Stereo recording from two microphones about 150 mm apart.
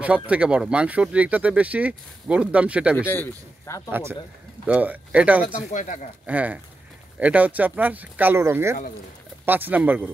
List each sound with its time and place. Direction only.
0.0 s speech: 10° right (ahead or behind)
3.1 s speech: 15° left (ahead or behind)
3.9 s speech: 15° right (ahead or behind)
5.4 s speech: 60° left (ahead or behind)
6.2 s speech: 10° right (ahead or behind)